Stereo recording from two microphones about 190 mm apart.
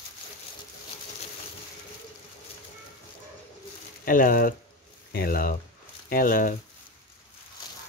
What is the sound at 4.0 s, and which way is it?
Speech, 45° left (ahead or behind).